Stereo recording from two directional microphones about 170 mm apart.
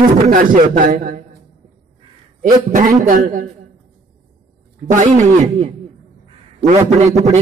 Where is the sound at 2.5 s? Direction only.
50° right (ahead or behind).